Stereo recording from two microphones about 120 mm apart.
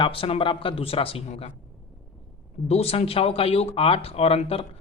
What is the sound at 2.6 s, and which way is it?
Speech, 60° left (ahead or behind).